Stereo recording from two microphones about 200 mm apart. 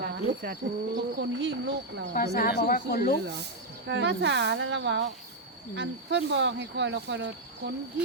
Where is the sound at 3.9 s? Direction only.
60° right (ahead or behind).